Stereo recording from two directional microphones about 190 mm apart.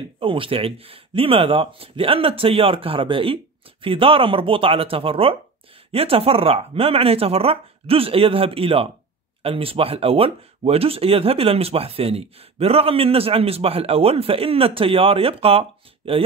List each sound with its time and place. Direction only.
0.2 s speech: 25° right (ahead or behind)